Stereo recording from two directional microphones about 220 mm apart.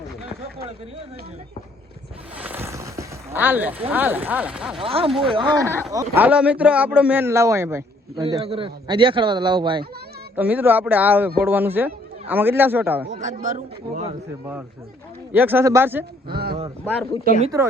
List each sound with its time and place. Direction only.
2.4 s speech: 10° right (ahead or behind)
4.8 s speech: 25° right (ahead or behind)
10.3 s speech: 5° right (ahead or behind)
13.1 s a man's voice: 35° right (ahead or behind)
15.3 s speech: 10° right (ahead or behind)
16.3 s speech: 45° right (ahead or behind)
16.8 s speech: 5° left (ahead or behind)